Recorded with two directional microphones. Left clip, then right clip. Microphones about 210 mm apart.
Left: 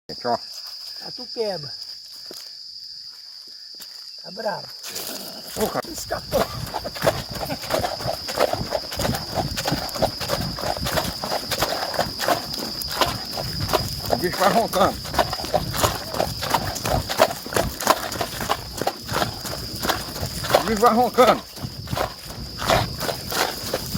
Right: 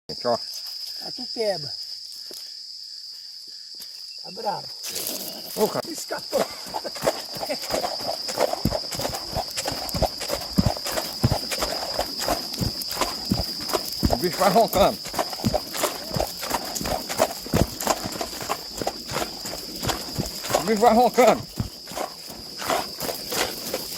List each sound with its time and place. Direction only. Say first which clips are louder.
0.2 s speech: even; 5° right (ahead or behind)
6.3 s a sound: left 2 dB; 45° left (ahead or behind)
9.0 s clip-clop: left 3 dB; 45° left (ahead or behind)
12.9 s a sound: left 6 dB; 40° left (ahead or behind)
13.6 s horse: left 2 dB; 45° left (ahead or behind)
14.2 s speech: right 1 dB; 15° right (ahead or behind)
15.1 s horse: left 4 dB; 45° left (ahead or behind)
20.4 s a sound: left 4 dB; 40° left (ahead or behind)
20.8 s speech: right 1 dB; 20° right (ahead or behind)
22.6 s walk: left 5 dB; 40° left (ahead or behind)